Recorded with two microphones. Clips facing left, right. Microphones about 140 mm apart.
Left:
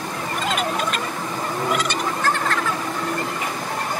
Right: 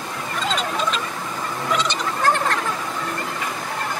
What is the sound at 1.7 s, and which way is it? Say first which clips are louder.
Fowl: right 2 dB; 50° left (ahead or behind).